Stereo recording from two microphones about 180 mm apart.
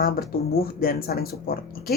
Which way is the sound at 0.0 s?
55° left (ahead or behind).